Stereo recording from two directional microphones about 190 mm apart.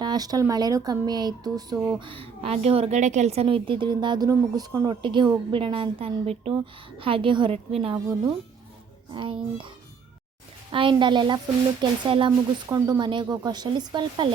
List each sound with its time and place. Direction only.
0.0 s a woman's voice: 20° right (ahead or behind)
10.7 s a woman's voice: 25° right (ahead or behind)